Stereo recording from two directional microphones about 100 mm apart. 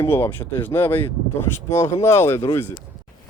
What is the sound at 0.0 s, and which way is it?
Speech, 25° left (ahead or behind).